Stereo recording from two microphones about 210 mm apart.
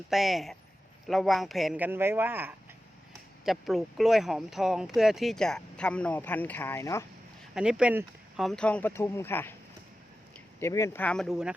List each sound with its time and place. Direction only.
0.1 s speech: centre (ahead or behind)
7.5 s speech: 5° right (ahead or behind)